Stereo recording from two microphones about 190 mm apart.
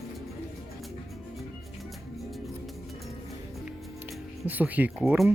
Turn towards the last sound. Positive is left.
turn(degrees=-5)  # may be behind; listen again after turning